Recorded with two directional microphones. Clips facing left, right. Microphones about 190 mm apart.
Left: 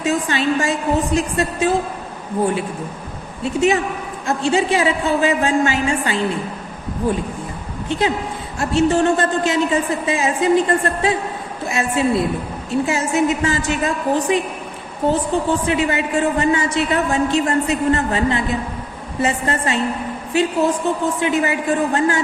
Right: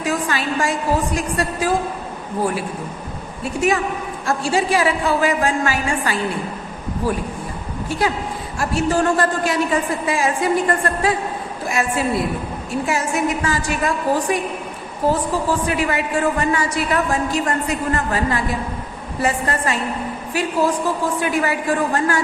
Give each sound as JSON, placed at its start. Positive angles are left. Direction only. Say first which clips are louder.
{"t": 0.0, "sound": "a woman's voice", "louder": "left 3 dB", "side_deg": 25}
{"t": 3.4, "sound": "a woman's voice", "louder": "left 2 dB", "side_deg": 25}
{"t": 7.9, "sound": "a woman's voice", "louder": "left 2 dB", "side_deg": 20}